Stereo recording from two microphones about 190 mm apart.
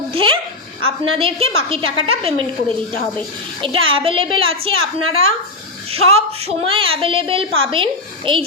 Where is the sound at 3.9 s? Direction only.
30° right (ahead or behind).